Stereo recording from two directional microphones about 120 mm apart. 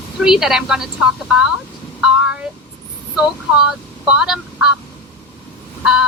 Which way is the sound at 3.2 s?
5° right (ahead or behind).